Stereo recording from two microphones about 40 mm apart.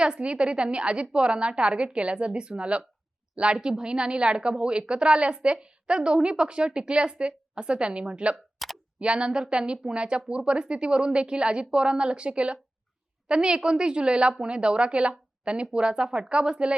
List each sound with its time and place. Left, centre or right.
0.2 s speech: right
8.5 s a sound: centre
9.0 s speech: right